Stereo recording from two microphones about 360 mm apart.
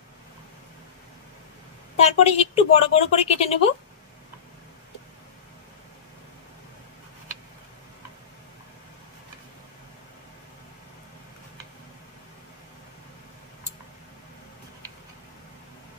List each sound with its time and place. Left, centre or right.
2.0 s speech: centre